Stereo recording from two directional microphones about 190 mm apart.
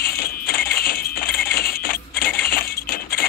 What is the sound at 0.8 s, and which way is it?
Music, 50° left (ahead or behind).